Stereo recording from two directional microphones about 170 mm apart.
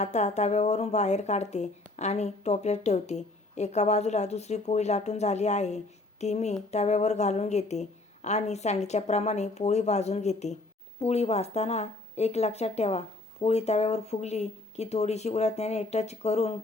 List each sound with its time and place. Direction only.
0.0 s a woman's voice: 40° left (ahead or behind)